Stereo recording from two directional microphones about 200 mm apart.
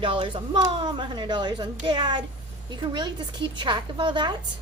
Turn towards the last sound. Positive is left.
turn(degrees=-20)  # may be behind; listen again after turning